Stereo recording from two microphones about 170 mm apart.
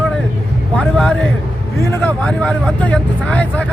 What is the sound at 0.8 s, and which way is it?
Speech, 5° left (ahead or behind).